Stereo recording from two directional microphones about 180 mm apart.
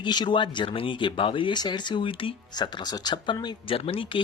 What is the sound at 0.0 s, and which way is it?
Speech, 25° left (ahead or behind).